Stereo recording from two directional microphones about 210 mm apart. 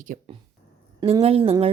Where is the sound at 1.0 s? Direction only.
25° right (ahead or behind).